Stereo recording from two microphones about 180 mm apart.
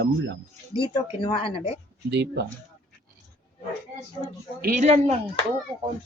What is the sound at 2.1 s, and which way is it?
Speech, 70° right (ahead or behind).